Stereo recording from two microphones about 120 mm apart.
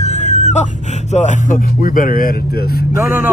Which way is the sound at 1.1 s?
90° left.